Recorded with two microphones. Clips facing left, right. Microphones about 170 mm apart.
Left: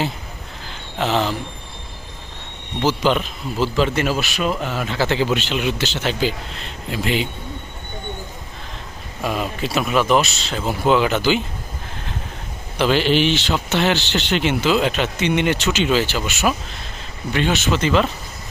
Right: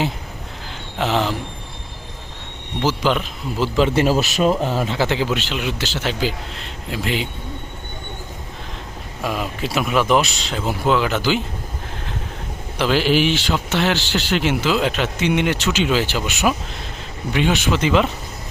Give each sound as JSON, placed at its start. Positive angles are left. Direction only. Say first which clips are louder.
{"t": 0.9, "sound": "speech", "louder": "even", "side_deg": -10}
{"t": 2.8, "sound": "speech", "louder": "left 1 dB", "side_deg": -5}
{"t": 3.6, "sound": "speech", "louder": "right 1 dB", "side_deg": -20}
{"t": 3.9, "sound": "speech", "louder": "right 4 dB", "side_deg": -35}
{"t": 4.9, "sound": "speech", "louder": "left 1 dB", "side_deg": -10}
{"t": 9.2, "sound": "speech", "louder": "left 1 dB", "side_deg": -5}
{"t": 12.8, "sound": "speech", "louder": "even", "side_deg": -5}